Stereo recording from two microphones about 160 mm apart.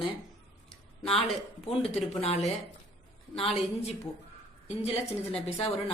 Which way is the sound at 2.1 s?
40° left (ahead or behind).